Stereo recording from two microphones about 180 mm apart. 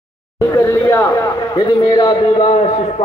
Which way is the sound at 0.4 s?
20° left (ahead or behind).